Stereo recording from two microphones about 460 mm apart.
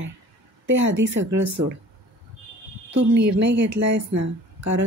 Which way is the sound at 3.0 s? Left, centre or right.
Right.